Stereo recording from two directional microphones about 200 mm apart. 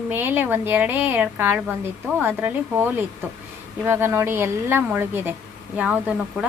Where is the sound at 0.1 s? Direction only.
10° right (ahead or behind).